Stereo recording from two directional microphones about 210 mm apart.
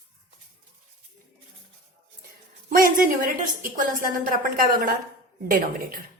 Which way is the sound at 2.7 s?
40° right (ahead or behind).